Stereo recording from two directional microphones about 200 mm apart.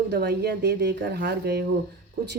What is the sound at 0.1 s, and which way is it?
A woman's voice, 55° right (ahead or behind).